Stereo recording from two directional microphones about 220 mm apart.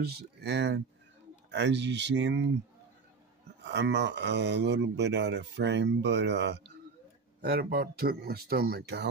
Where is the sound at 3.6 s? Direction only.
50° right (ahead or behind).